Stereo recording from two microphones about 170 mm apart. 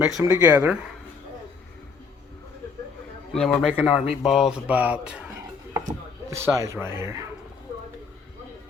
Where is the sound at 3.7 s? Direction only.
5° right (ahead or behind).